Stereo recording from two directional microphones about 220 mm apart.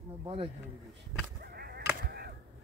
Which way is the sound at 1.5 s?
45° right (ahead or behind).